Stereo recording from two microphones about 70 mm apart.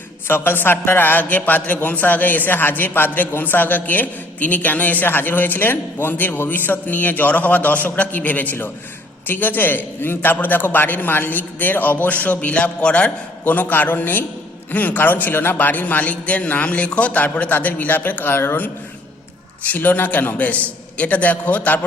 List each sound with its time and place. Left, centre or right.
0.3 s a man's voice: left